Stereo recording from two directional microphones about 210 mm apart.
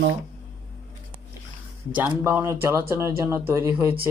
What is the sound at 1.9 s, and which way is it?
Speech, 10° right (ahead or behind).